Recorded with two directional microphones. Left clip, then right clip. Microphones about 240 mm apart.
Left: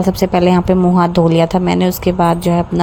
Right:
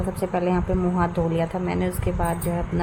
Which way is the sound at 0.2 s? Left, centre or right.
Left.